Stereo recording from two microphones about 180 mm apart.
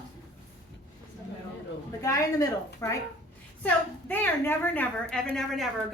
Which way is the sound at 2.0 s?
15° left (ahead or behind).